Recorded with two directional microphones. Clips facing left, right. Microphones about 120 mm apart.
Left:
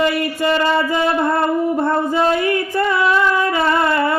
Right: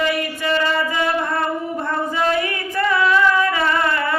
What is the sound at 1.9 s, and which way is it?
Female singing, 30° left (ahead or behind).